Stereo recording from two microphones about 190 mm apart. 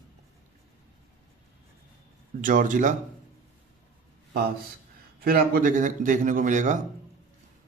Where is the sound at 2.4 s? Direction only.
45° right (ahead or behind).